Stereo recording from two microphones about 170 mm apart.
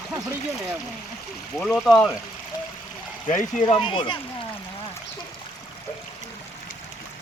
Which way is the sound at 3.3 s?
45° left (ahead or behind).